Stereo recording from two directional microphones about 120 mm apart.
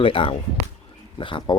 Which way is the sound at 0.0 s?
45° left (ahead or behind).